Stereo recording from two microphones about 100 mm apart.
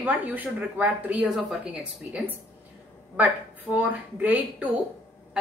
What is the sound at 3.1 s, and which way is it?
A woman's voice, 15° right (ahead or behind).